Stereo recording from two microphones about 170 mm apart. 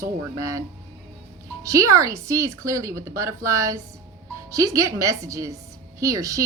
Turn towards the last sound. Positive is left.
turn(degrees=-20)  # may be behind; listen again after turning